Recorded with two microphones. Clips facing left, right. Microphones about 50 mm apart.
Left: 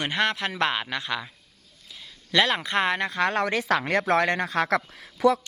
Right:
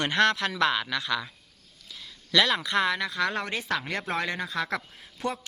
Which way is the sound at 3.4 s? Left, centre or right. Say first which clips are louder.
Left 6 dB; left.